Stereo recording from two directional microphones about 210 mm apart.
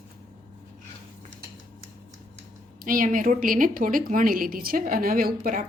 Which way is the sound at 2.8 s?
40° right (ahead or behind).